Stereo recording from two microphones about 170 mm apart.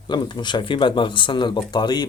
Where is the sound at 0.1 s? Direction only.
25° left (ahead or behind).